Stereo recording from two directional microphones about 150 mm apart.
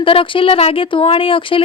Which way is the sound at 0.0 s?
35° left (ahead or behind).